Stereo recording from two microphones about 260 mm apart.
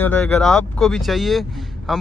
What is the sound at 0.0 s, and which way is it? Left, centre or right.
Speech, centre.